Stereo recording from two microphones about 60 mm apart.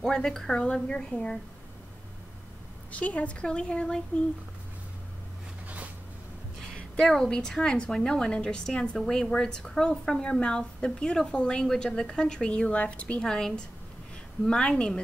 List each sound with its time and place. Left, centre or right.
0.0 s a woman's voice: centre
2.9 s a woman's voice: left
6.7 s a woman's voice: centre